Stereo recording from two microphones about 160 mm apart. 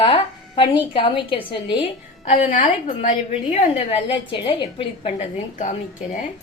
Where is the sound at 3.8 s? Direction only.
35° left (ahead or behind).